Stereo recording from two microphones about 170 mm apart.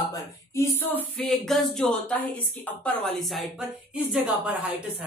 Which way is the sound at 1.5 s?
5° left (ahead or behind).